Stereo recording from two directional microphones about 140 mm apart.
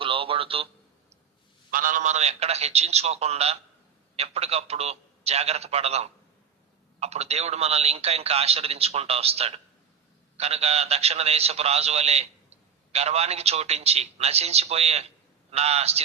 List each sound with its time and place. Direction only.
0.0 s telephone: 40° right (ahead or behind)
1.7 s a man's voice: 75° right (ahead or behind); by 16.0 s 50° right (ahead or behind)